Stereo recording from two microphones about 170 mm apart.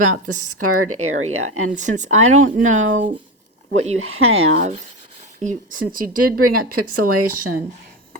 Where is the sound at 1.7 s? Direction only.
45° right (ahead or behind).